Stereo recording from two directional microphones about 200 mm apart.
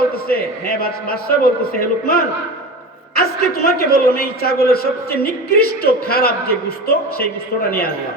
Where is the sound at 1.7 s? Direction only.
45° left (ahead or behind).